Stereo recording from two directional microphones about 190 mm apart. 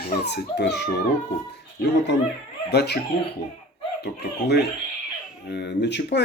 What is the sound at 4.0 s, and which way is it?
Speech, 60° left (ahead or behind).